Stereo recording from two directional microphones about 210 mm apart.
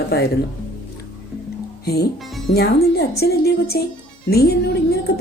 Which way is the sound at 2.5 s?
50° left (ahead or behind).